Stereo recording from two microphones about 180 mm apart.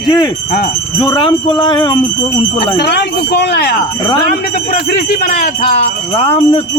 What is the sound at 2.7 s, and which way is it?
Speech, 65° left (ahead or behind).